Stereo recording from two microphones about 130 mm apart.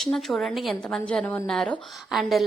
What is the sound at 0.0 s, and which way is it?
A woman's voice, centre (ahead or behind).